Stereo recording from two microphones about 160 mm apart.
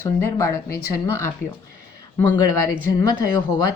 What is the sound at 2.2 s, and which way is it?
Speech, 25° left (ahead or behind).